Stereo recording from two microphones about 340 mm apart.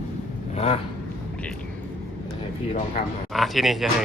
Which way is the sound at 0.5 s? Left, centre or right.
Centre.